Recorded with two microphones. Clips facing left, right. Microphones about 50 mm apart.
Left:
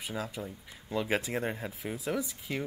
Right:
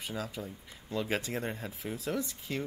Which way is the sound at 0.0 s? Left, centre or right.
Centre.